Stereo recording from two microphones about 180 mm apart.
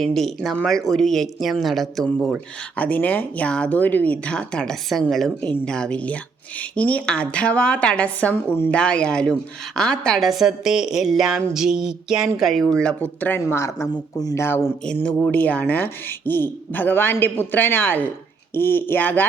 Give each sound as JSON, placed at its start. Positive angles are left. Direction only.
{"t": 0.0, "sound": "a woman's voice", "side_deg": 0}